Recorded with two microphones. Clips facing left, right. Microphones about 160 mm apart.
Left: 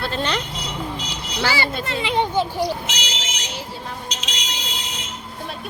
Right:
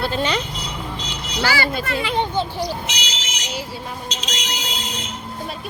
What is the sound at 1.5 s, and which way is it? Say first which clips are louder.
Speech: right 2 dB; 25° left (ahead or behind).